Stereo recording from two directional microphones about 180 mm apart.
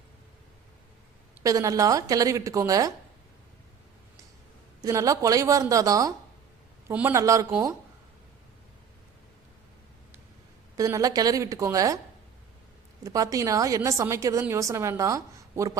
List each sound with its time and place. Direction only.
1.5 s a woman's voice: 20° right (ahead or behind)
4.8 s a woman's voice: 20° right (ahead or behind)
10.8 s a woman's voice: 20° right (ahead or behind)
13.0 s a woman's voice: 20° right (ahead or behind)